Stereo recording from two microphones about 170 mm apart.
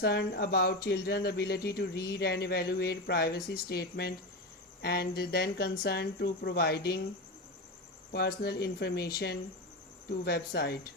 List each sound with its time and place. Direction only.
0.0 s speech: 70° left (ahead or behind)
8.1 s speech: 70° left (ahead or behind)